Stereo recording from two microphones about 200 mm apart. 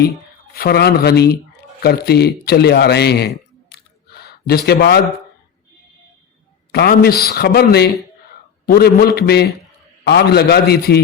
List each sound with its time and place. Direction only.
0.5 s a man's voice: 50° left (ahead or behind)
6.7 s a man's voice: 55° left (ahead or behind)